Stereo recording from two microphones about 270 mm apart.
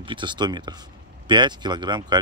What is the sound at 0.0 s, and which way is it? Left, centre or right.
Speech, centre.